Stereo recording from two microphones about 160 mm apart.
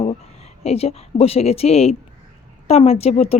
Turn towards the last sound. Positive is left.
turn(degrees=40)  # may be behind; listen again after turning